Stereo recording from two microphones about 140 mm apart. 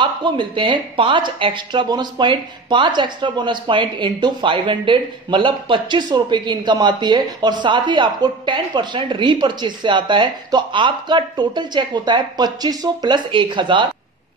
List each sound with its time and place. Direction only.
0.0 s speech: 35° right (ahead or behind)